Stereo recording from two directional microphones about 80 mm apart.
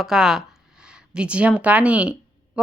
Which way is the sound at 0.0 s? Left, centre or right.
Centre.